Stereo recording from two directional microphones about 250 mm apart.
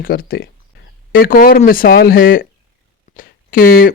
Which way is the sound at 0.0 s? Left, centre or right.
Left.